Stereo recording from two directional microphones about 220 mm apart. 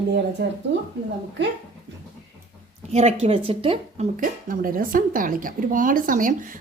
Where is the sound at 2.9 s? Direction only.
30° right (ahead or behind).